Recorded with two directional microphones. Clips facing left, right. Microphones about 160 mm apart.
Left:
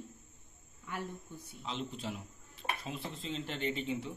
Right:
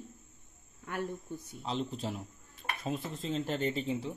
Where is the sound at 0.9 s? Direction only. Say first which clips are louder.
Right 4 dB; 55° right (ahead or behind).